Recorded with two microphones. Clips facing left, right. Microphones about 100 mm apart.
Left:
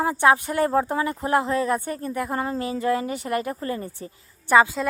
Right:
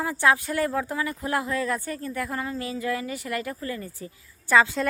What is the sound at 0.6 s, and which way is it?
Speech, 35° left (ahead or behind).